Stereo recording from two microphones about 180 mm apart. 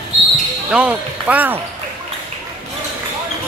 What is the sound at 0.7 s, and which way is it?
Speech, 5° right (ahead or behind).